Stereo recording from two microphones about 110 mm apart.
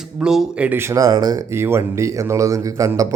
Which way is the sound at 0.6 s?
20° right (ahead or behind).